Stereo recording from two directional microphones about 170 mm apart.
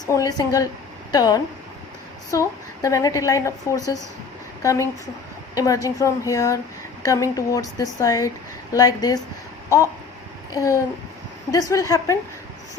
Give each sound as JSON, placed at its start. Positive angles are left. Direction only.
{"t": 0.1, "sound": "a woman's voice", "side_deg": 20}
{"t": 10.5, "sound": "a woman's voice", "side_deg": 20}